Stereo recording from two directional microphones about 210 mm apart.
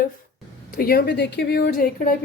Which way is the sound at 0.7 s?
45° left (ahead or behind).